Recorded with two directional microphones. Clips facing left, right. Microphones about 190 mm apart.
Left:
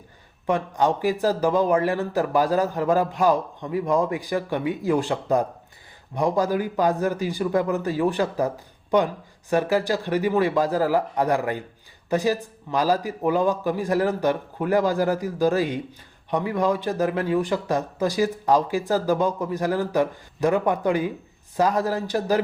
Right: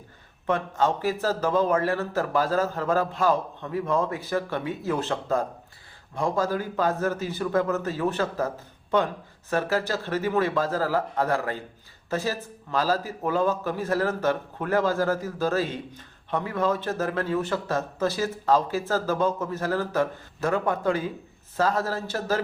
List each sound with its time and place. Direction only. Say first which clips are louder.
0.4 s a man's voice: left 2 dB; 15° left (ahead or behind)